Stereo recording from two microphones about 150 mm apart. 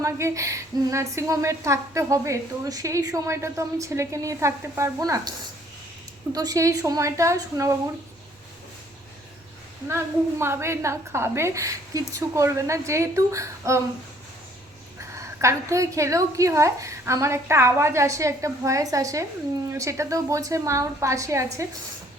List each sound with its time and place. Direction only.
0.0 s a woman's voice: 20° right (ahead or behind)
6.3 s a woman's voice: 25° right (ahead or behind)
9.9 s a woman's voice: 15° right (ahead or behind)
15.4 s a woman's voice: 20° right (ahead or behind)